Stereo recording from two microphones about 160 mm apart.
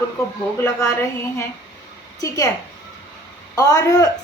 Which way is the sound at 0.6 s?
15° left (ahead or behind).